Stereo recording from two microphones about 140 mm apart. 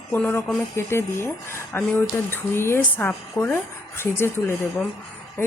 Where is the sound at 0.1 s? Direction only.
15° left (ahead or behind).